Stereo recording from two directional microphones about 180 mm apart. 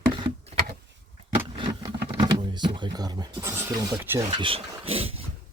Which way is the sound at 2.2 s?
25° right (ahead or behind).